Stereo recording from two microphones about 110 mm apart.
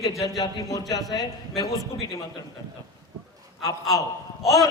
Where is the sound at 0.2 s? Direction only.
30° left (ahead or behind).